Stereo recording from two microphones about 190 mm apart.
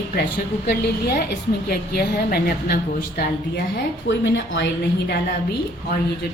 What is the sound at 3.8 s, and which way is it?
A woman's voice, 70° left (ahead or behind).